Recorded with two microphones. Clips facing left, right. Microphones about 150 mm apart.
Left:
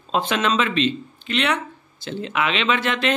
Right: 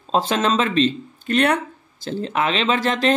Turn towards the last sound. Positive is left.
turn(degrees=-40)  # may be behind; listen again after turning